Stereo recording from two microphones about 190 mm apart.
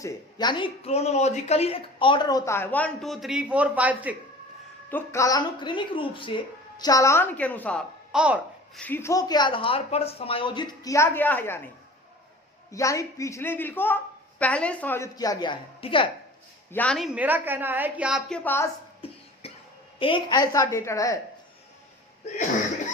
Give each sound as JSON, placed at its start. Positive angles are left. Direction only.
{"t": 0.0, "sound": "speech", "side_deg": 20}
{"t": 4.9, "sound": "a woman's voice", "side_deg": 15}
{"t": 8.1, "sound": "a child's voice", "side_deg": -5}
{"t": 8.8, "sound": "speech", "side_deg": 10}
{"t": 12.7, "sound": "a woman's voice", "side_deg": 15}
{"t": 16.7, "sound": "speech", "side_deg": 5}
{"t": 17.2, "sound": "a woman's voice", "side_deg": -10}
{"t": 19.0, "sound": "cough", "side_deg": 30}
{"t": 20.0, "sound": "a woman's voice", "side_deg": 25}